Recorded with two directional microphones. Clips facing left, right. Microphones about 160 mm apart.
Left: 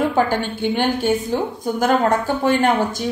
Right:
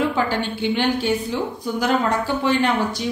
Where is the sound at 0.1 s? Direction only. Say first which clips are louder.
Left 3 dB; 50° left (ahead or behind).